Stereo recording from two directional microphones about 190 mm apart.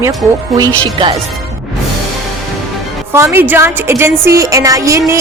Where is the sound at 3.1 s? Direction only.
15° right (ahead or behind).